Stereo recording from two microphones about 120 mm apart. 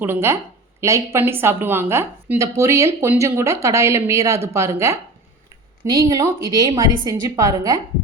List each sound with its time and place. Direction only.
0.0 s a woman's voice: 20° right (ahead or behind); by 6.8 s 40° right (ahead or behind)
7.1 s speech: 25° right (ahead or behind)